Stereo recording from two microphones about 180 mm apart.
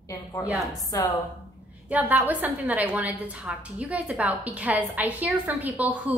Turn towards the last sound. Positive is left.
turn(degrees=-10)  # may be behind; listen again after turning